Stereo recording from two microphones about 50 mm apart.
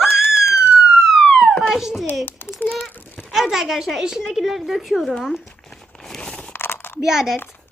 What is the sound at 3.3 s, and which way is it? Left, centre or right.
A child's voice, centre.